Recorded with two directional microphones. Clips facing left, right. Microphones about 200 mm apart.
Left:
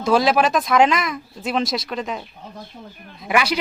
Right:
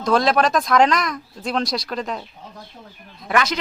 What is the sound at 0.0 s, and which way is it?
A man's voice, 5° left (ahead or behind).